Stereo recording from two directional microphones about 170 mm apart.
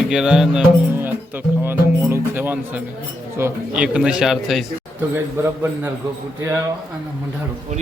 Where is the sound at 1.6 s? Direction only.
15° right (ahead or behind).